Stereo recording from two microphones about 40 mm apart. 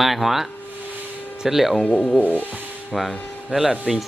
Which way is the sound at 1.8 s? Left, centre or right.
Left.